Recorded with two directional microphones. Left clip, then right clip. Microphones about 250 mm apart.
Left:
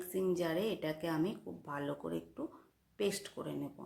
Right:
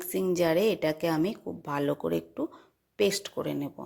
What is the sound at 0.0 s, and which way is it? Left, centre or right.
Speech, right.